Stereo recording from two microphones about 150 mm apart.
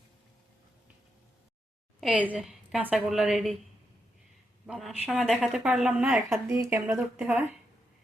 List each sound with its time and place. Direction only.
2.0 s a woman's voice: 5° right (ahead or behind)
4.6 s speech: 5° right (ahead or behind)
6.5 s speech: 20° right (ahead or behind)
6.9 s speech: 5° right (ahead or behind)